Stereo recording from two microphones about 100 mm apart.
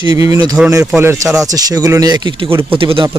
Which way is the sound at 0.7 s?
30° right (ahead or behind).